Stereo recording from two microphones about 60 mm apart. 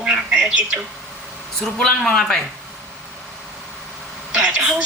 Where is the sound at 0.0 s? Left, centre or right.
Centre.